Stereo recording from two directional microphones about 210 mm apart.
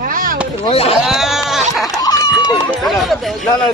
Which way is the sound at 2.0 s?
20° left (ahead or behind).